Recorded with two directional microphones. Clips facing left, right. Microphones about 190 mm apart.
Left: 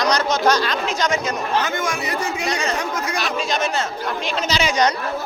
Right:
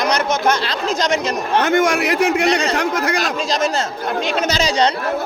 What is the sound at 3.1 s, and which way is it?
A man's voice, 45° right (ahead or behind).